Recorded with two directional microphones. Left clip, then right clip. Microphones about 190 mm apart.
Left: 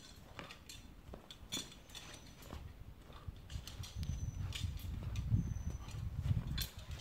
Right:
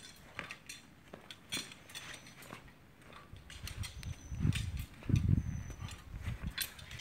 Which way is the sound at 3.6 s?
10° left (ahead or behind).